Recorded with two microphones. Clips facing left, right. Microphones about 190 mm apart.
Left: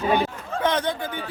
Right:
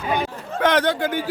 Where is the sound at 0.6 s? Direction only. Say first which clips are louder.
Right 5 dB; 80° right.